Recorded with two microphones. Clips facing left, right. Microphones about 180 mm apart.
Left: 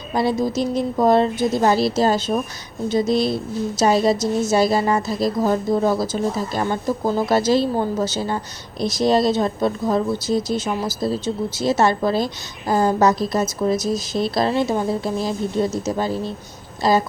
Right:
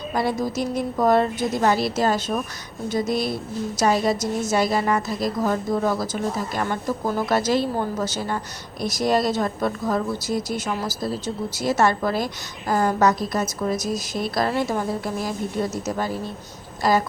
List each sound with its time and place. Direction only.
0.1 s a woman's voice: 25° left (ahead or behind)